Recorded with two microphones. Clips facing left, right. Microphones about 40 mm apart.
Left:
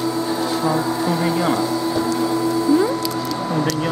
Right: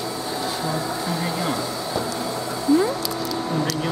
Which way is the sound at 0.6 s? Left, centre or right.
Centre.